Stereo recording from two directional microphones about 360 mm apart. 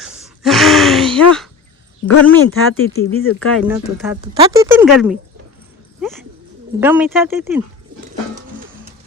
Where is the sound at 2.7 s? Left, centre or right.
Left.